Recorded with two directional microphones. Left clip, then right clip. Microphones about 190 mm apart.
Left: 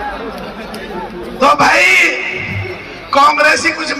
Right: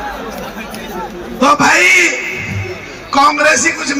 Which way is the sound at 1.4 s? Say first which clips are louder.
Even; 30° left (ahead or behind).